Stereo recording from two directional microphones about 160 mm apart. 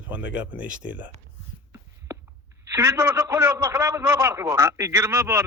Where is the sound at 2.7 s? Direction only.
15° right (ahead or behind).